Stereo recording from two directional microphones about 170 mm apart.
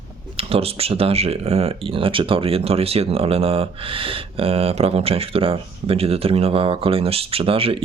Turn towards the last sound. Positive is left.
turn(degrees=-35)  # may be behind; listen again after turning